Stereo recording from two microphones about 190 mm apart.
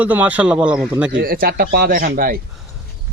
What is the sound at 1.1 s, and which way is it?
Speech, 50° right (ahead or behind).